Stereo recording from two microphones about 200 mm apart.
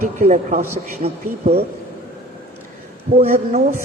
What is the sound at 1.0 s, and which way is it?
Speech, 30° right (ahead or behind).